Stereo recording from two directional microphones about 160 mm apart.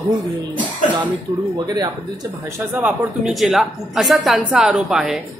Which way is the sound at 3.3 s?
Centre (ahead or behind).